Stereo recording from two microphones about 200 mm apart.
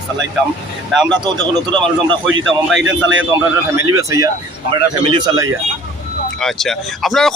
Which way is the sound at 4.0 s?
15° right (ahead or behind).